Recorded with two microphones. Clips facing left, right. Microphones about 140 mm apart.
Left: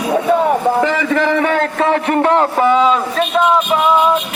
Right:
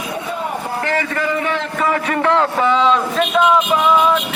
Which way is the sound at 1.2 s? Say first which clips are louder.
Left 5 dB; 90° left.